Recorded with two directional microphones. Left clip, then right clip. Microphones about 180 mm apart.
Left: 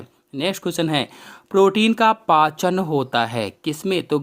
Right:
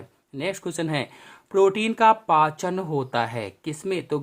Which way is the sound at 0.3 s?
30° left (ahead or behind).